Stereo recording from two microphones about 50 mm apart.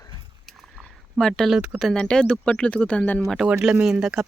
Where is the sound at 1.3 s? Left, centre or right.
Centre.